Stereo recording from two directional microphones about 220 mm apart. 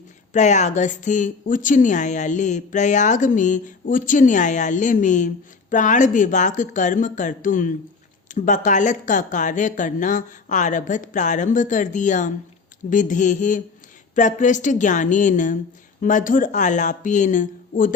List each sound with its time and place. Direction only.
0.3 s a woman's voice: 30° left (ahead or behind)